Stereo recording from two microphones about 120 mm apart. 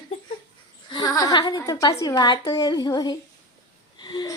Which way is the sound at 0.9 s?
35° left (ahead or behind).